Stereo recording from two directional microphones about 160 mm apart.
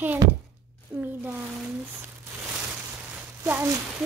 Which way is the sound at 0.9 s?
10° right (ahead or behind).